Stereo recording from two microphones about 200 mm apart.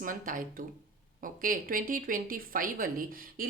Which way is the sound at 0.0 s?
40° right (ahead or behind).